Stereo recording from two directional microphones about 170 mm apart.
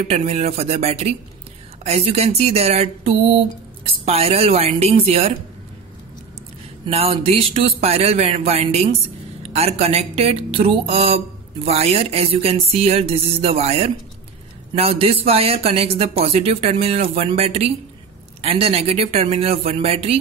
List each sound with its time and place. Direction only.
0.1 s speech: 40° right (ahead or behind)
6.9 s speech: 35° right (ahead or behind)